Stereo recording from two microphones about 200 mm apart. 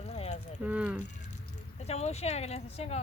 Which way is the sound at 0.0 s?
35° left (ahead or behind).